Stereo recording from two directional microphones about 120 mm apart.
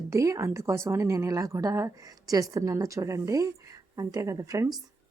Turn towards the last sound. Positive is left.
turn(degrees=-30)  # may be behind; listen again after turning